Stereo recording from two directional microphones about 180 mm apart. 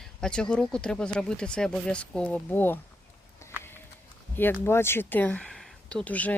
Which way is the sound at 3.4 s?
15° left (ahead or behind).